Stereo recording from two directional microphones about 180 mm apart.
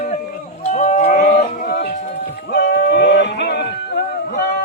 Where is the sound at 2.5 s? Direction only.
65° left (ahead or behind).